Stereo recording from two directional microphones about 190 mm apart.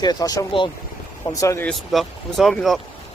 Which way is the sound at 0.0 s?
20° left (ahead or behind).